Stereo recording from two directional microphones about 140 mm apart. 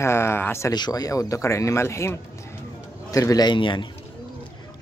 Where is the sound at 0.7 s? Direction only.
30° left (ahead or behind).